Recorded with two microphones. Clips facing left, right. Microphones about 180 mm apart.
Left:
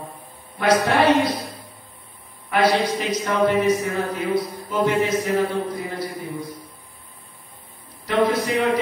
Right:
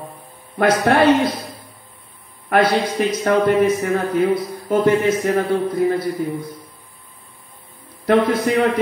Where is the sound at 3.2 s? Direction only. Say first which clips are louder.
Right 3 dB; 55° right (ahead or behind).